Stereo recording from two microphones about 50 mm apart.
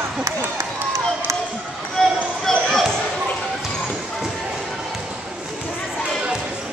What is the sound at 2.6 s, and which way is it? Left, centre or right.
Basketball bounce, centre.